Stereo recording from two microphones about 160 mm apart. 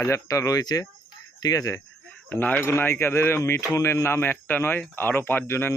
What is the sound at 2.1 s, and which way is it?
Speech, 10° left (ahead or behind).